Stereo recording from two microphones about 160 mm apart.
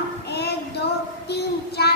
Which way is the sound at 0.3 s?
90° left.